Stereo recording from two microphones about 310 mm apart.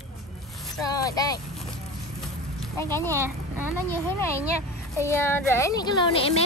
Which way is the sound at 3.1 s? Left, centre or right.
Centre.